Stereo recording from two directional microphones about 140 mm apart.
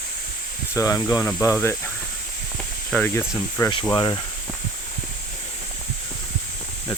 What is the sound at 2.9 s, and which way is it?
Speech, 15° left (ahead or behind).